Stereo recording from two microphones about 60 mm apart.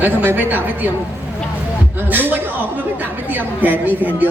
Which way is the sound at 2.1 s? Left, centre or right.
Right.